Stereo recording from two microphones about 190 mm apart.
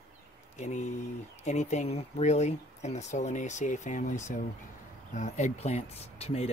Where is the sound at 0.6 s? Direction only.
40° left (ahead or behind).